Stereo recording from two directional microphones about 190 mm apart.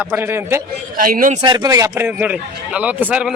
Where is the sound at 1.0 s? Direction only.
45° right (ahead or behind).